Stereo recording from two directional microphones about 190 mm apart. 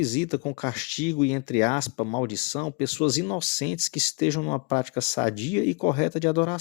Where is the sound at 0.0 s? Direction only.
40° left (ahead or behind).